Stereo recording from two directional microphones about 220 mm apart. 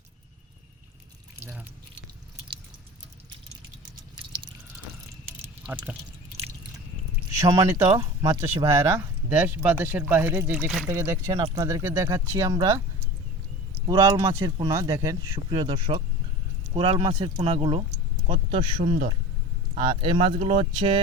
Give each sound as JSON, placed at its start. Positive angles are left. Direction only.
{"t": 1.5, "sound": "drip", "side_deg": -10}
{"t": 5.4, "sound": "a sound", "side_deg": -10}
{"t": 7.3, "sound": "speech", "side_deg": -15}